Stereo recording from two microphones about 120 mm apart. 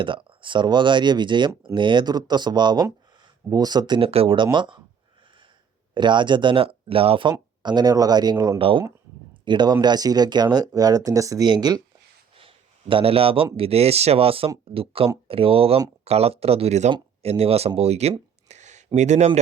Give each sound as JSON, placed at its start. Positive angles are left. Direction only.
{"t": 0.0, "sound": "speech", "side_deg": -45}
{"t": 4.1, "sound": "speech", "side_deg": -50}
{"t": 5.9, "sound": "speech", "side_deg": -40}
{"t": 7.6, "sound": "speech", "side_deg": -35}
{"t": 8.5, "sound": "speech", "side_deg": -45}
{"t": 12.4, "sound": "speech", "side_deg": -50}
{"t": 18.4, "sound": "a sound", "side_deg": -75}
{"t": 18.9, "sound": "speech", "side_deg": -70}